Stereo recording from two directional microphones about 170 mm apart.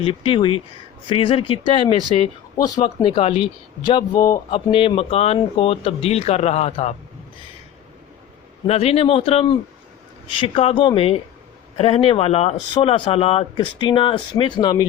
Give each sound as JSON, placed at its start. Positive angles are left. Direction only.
{"t": 0.0, "sound": "speech", "side_deg": 30}
{"t": 4.2, "sound": "a sound", "side_deg": 20}
{"t": 4.7, "sound": "speech", "side_deg": 30}
{"t": 8.6, "sound": "speech", "side_deg": 40}